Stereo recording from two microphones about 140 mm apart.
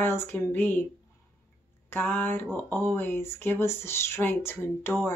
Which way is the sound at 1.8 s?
15° left (ahead or behind).